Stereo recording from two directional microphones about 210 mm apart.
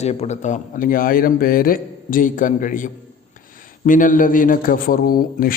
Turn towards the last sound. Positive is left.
turn(degrees=45)  # may be behind; listen again after turning